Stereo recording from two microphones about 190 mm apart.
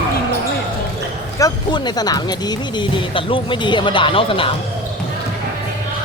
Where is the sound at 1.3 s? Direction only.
20° left (ahead or behind).